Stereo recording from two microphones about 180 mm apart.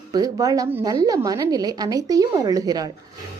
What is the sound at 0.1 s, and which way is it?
A woman's voice, 20° right (ahead or behind).